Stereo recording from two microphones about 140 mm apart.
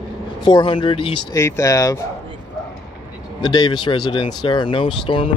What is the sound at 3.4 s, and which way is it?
Speech, 30° left (ahead or behind).